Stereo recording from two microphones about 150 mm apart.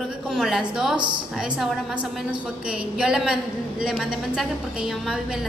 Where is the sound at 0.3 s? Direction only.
Centre (ahead or behind).